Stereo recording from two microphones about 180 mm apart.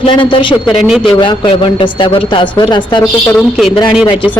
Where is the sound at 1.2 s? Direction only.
25° left (ahead or behind).